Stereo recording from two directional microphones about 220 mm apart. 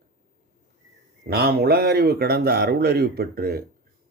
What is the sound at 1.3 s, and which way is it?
Speech, 45° right (ahead or behind).